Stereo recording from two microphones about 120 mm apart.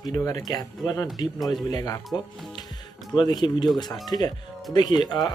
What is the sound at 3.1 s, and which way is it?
Speech, 40° left (ahead or behind).